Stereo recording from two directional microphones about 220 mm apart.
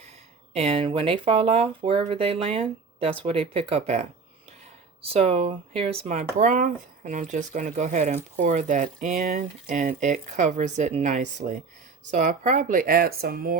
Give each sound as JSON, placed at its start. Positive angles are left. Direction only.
{"t": 0.5, "sound": "speech", "side_deg": -25}
{"t": 5.0, "sound": "speech", "side_deg": -25}